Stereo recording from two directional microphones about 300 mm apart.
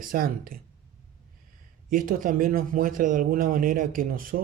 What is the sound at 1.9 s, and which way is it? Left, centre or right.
Speech, right.